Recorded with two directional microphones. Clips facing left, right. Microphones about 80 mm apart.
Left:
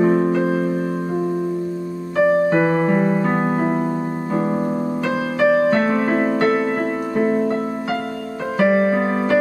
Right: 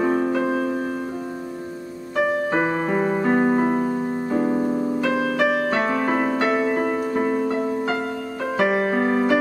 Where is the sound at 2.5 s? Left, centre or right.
Centre.